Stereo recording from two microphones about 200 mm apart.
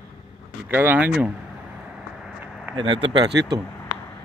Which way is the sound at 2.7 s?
25° right (ahead or behind).